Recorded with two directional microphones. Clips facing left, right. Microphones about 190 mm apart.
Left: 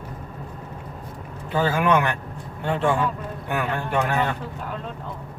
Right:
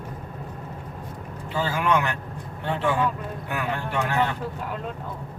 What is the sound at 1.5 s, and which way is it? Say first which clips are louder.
Speech: left 4 dB; 55° left (ahead or behind).